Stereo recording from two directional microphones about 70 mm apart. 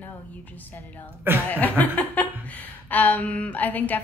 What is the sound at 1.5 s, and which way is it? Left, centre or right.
Speech, left.